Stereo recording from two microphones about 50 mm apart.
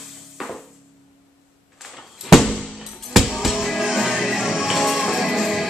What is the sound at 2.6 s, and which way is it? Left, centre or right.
Music, centre.